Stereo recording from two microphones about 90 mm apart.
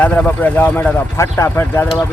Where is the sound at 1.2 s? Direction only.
30° left (ahead or behind).